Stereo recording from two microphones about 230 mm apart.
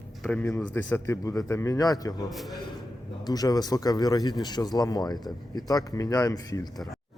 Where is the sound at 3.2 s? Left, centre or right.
Centre.